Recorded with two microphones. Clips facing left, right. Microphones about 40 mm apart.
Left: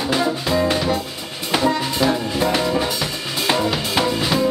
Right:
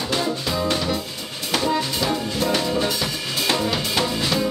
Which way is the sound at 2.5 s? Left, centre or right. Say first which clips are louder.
Left 2 dB; centre.